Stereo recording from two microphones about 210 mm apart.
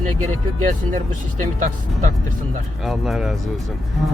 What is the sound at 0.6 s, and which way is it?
Speech, 35° right (ahead or behind).